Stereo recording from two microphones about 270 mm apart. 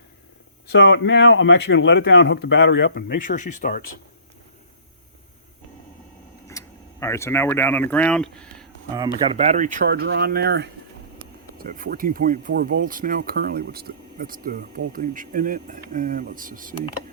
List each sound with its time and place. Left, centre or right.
0.7 s speech: left
6.5 s speech: centre
9.2 s speech: right